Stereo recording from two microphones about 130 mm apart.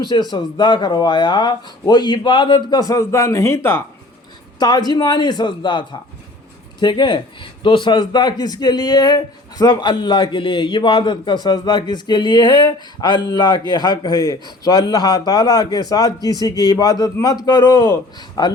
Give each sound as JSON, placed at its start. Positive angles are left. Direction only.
{"t": 0.0, "sound": "speech", "side_deg": 35}
{"t": 4.6, "sound": "a man's voice", "side_deg": 30}